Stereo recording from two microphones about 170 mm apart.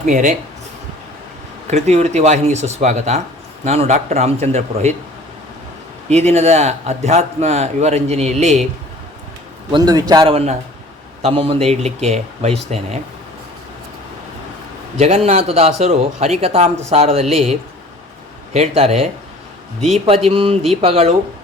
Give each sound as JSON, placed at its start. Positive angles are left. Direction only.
{"t": 0.0, "sound": "speech", "side_deg": -50}
{"t": 1.7, "sound": "a man's voice", "side_deg": -40}
{"t": 6.1, "sound": "a man's voice", "side_deg": -40}
{"t": 9.7, "sound": "a man's voice", "side_deg": -20}
{"t": 14.9, "sound": "a man's voice", "side_deg": -40}
{"t": 20.2, "sound": "a man's voice", "side_deg": -35}